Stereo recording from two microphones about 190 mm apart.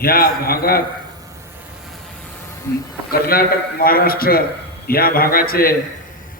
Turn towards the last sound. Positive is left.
turn(degrees=50)  # may be behind; listen again after turning